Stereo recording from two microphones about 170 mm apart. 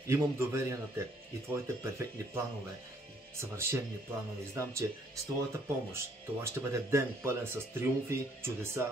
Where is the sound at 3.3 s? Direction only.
15° right (ahead or behind).